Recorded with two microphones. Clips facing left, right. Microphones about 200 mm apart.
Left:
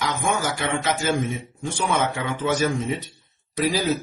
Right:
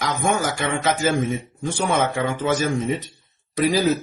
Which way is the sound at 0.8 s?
45° right (ahead or behind).